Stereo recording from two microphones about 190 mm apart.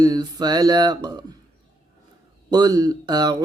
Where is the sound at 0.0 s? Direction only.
20° right (ahead or behind).